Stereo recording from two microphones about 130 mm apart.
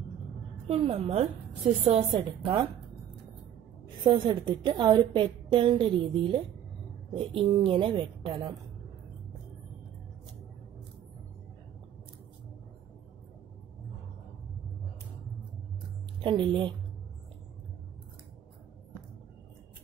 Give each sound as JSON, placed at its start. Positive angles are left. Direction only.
{"t": 0.7, "sound": "a woman's voice", "side_deg": -45}
{"t": 2.1, "sound": "a woman's voice", "side_deg": -35}
{"t": 4.0, "sound": "a woman's voice", "side_deg": -35}
{"t": 16.2, "sound": "a woman's voice", "side_deg": -40}